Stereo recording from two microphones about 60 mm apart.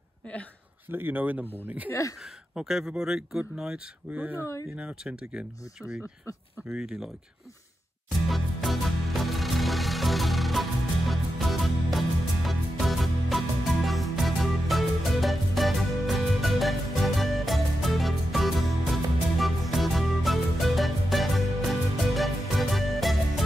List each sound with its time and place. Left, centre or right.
0.9 s speech: right
2.5 s speech: centre
4.1 s speech: right
8.3 s music: centre